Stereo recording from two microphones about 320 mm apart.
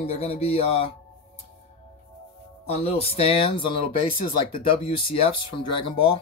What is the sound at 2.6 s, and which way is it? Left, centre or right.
Speech, centre.